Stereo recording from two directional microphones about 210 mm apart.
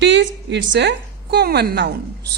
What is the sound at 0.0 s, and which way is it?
A woman's voice, 60° right (ahead or behind).